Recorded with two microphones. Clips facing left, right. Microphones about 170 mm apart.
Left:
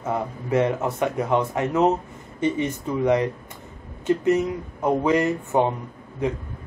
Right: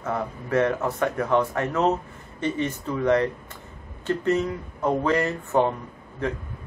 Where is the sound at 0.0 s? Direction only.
15° left (ahead or behind).